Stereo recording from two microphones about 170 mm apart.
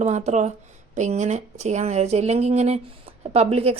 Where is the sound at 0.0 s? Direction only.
45° right (ahead or behind).